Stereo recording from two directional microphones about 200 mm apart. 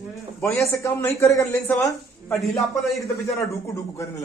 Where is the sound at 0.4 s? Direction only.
15° left (ahead or behind).